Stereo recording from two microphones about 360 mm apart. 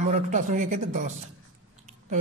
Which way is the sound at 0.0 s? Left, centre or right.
Right.